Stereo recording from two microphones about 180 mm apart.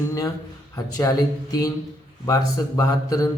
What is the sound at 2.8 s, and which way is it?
Speech, 20° left (ahead or behind).